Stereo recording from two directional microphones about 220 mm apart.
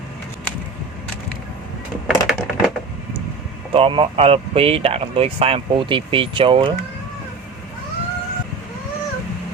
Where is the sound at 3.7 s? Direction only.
25° right (ahead or behind).